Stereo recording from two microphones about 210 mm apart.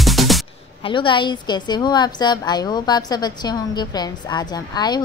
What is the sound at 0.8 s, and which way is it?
A woman's voice, 25° left (ahead or behind).